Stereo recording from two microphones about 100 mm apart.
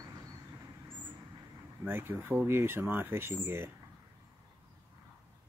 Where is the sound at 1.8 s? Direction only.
20° right (ahead or behind).